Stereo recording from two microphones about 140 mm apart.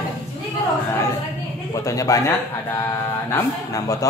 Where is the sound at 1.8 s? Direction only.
25° left (ahead or behind).